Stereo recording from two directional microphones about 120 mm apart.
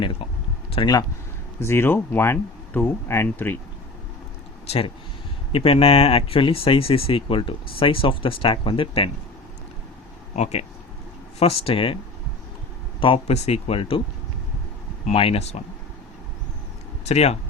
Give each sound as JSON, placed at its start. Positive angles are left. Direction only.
{"t": 0.8, "sound": "speech", "side_deg": 45}
{"t": 1.5, "sound": "speech", "side_deg": 20}
{"t": 5.5, "sound": "speech", "side_deg": 50}
{"t": 10.3, "sound": "speech", "side_deg": 65}
{"t": 11.3, "sound": "speech", "side_deg": 55}
{"t": 13.0, "sound": "speech", "side_deg": 45}
{"t": 13.3, "sound": "speech", "side_deg": 60}
{"t": 15.0, "sound": "speech", "side_deg": 55}
{"t": 17.1, "sound": "speech", "side_deg": 65}